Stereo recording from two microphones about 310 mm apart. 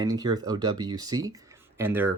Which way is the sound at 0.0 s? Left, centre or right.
Centre.